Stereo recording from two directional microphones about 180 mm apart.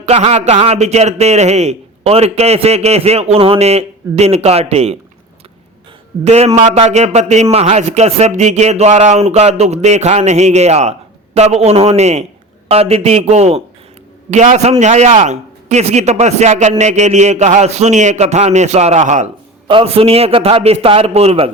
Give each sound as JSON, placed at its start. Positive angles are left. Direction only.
{"t": 0.0, "sound": "a man's voice", "side_deg": -35}
{"t": 6.2, "sound": "a man's voice", "side_deg": -35}
{"t": 19.6, "sound": "a man's voice", "side_deg": -30}